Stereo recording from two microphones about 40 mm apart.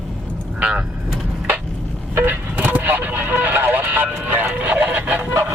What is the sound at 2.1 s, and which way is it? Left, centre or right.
Vehicle, right.